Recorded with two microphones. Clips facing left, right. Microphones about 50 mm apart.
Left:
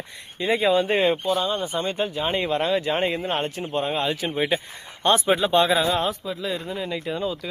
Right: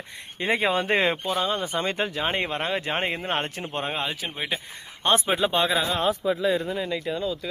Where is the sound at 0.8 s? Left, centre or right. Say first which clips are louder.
Left 2 dB; right.